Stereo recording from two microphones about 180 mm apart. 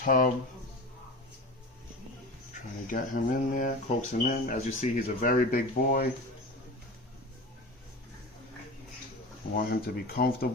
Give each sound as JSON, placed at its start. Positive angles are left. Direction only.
{"t": 0.0, "sound": "speech", "side_deg": 50}
{"t": 2.8, "sound": "speech", "side_deg": 45}
{"t": 9.6, "sound": "speech", "side_deg": 55}